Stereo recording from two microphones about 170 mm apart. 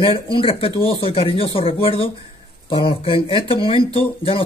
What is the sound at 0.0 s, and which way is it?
Speech, 30° left (ahead or behind).